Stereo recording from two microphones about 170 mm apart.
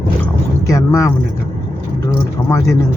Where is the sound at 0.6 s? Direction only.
20° left (ahead or behind).